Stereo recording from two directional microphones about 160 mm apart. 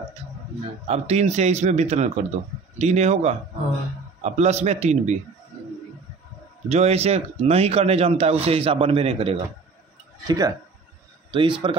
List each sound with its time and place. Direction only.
0.8 s a man's voice: 40° right (ahead or behind)
6.7 s speech: 40° right (ahead or behind)
10.2 s speech: 20° right (ahead or behind)